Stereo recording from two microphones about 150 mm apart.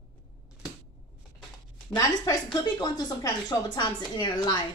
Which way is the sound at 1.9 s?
25° left (ahead or behind).